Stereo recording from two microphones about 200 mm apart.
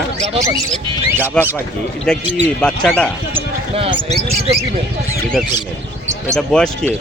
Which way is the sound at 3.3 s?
25° right (ahead or behind).